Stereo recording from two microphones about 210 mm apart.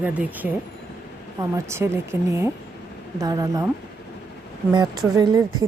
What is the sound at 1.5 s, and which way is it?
Speech, 10° right (ahead or behind).